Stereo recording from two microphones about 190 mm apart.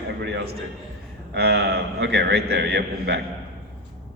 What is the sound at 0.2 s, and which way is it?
A man's voice, 65° right (ahead or behind).